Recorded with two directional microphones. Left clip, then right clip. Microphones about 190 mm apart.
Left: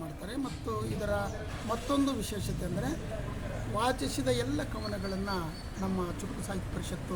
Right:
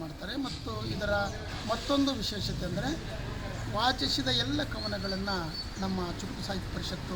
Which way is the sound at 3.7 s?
15° left (ahead or behind).